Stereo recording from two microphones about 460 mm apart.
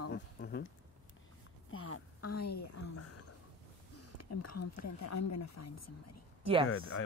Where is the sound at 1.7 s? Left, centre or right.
Left.